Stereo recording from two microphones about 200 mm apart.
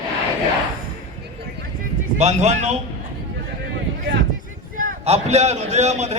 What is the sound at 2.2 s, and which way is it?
Speech, 35° right (ahead or behind).